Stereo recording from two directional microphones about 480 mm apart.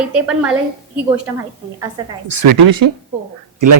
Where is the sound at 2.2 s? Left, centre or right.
Right.